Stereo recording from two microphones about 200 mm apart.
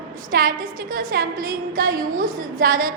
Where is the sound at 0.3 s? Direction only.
45° right (ahead or behind).